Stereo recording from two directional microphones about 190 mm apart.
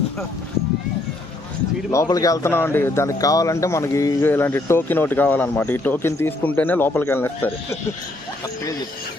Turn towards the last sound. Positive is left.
turn(degrees=10)  # may be behind; listen again after turning